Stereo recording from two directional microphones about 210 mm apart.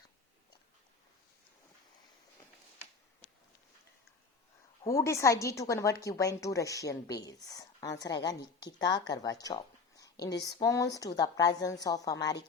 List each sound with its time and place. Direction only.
4.9 s speech: 15° left (ahead or behind)